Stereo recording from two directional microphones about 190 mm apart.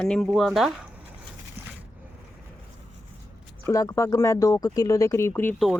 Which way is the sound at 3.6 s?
15° left (ahead or behind).